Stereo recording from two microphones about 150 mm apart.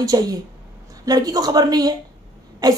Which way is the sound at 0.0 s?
25° right (ahead or behind).